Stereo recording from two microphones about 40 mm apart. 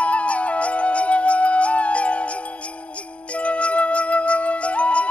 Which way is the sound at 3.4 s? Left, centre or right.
Left.